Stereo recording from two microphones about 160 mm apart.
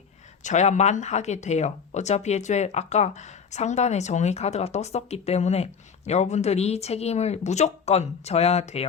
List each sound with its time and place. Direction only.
0.4 s speech: 50° left (ahead or behind)